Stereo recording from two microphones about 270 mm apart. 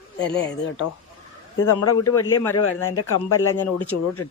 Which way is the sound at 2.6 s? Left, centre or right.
Left.